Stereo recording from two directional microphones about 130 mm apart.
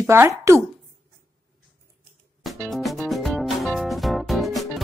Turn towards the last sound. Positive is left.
turn(degrees=0)  # may be behind; listen again after turning